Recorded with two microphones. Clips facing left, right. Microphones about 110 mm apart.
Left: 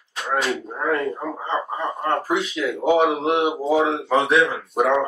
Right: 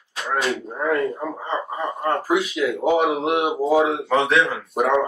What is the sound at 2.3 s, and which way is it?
Speech, 5° right (ahead or behind).